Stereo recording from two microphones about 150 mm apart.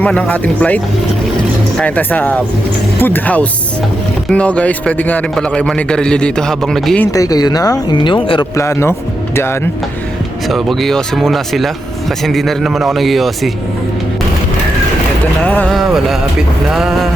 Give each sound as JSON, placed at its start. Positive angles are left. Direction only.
{"t": 0.0, "sound": "a man's voice", "side_deg": 10}
{"t": 1.8, "sound": "a man's voice", "side_deg": 10}
{"t": 7.0, "sound": "speech", "side_deg": 20}
{"t": 8.5, "sound": "speech", "side_deg": 20}
{"t": 10.5, "sound": "speech", "side_deg": 0}
{"t": 15.4, "sound": "a man's voice", "side_deg": 10}
{"t": 15.7, "sound": "speech", "side_deg": 0}